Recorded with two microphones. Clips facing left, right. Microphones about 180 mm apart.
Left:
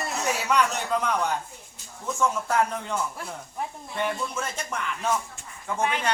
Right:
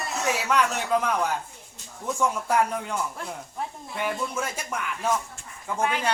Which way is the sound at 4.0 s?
10° right (ahead or behind).